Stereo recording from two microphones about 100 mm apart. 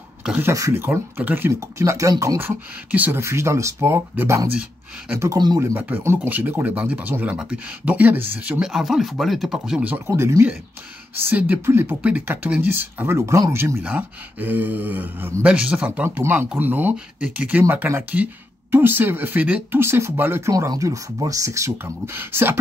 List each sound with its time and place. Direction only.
0.4 s speech: 30° right (ahead or behind)
2.4 s speech: 20° right (ahead or behind)
5.6 s speech: 25° right (ahead or behind); by 9.8 s 5° right (ahead or behind)
9.8 s speech: 25° right (ahead or behind)